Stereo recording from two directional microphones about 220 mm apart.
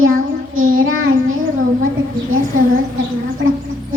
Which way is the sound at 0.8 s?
65° right (ahead or behind).